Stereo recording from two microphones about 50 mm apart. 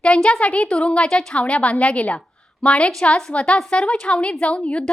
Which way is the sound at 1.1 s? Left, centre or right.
Centre.